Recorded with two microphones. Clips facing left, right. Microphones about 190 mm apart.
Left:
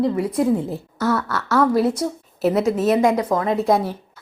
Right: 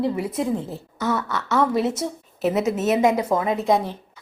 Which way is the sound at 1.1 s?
20° right (ahead or behind).